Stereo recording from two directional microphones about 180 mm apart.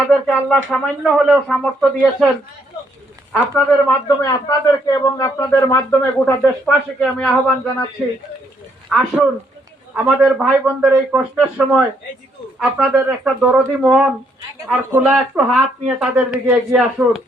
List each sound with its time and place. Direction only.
0.1 s speech: 5° left (ahead or behind)
3.5 s speech: 10° left (ahead or behind)
4.3 s a man's voice: 20° left (ahead or behind); by 17.2 s centre (ahead or behind)